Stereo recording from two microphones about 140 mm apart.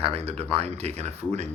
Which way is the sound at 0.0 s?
45° right (ahead or behind).